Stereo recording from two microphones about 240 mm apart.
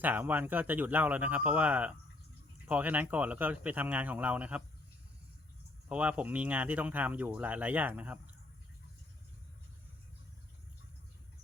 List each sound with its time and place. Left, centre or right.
0.0 s speech: centre
5.9 s speech: centre